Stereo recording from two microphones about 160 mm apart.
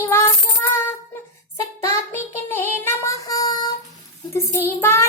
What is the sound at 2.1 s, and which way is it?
Child singing, 15° left (ahead or behind).